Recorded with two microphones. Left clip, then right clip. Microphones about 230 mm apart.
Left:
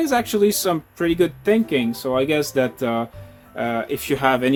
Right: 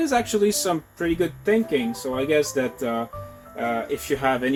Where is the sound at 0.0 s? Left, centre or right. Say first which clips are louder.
Left 3 dB; left.